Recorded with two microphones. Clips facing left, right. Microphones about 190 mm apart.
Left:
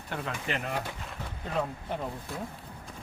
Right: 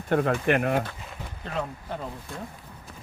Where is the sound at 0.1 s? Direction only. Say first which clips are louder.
Right 12 dB; 60° right (ahead or behind).